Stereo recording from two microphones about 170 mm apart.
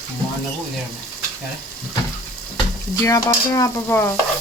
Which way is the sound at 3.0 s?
20° left (ahead or behind).